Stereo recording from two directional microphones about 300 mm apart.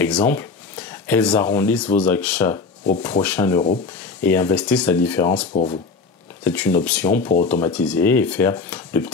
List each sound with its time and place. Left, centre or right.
0.0 s speech: centre
5.5 s speech: left
6.4 s speech: centre